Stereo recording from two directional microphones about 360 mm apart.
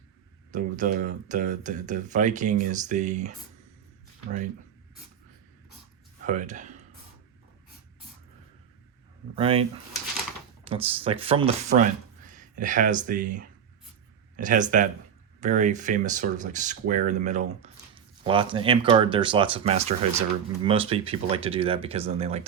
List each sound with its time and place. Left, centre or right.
0.5 s speech: right
6.2 s speech: centre
9.3 s speech: centre